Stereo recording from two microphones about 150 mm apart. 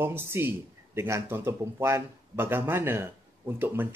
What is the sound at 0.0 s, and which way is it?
A man's voice, 15° right (ahead or behind).